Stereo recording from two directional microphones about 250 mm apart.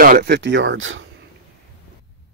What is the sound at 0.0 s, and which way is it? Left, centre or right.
Speech, right.